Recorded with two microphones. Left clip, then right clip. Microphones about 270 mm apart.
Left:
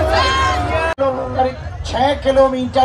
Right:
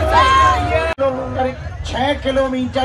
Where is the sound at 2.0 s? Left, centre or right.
Left.